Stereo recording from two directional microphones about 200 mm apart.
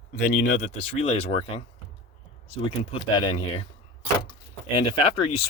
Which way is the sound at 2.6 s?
25° left (ahead or behind).